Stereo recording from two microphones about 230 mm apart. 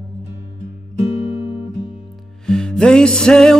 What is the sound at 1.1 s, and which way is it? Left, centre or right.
Music, left.